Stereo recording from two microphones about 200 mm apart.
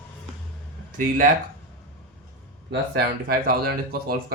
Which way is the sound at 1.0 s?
45° right (ahead or behind).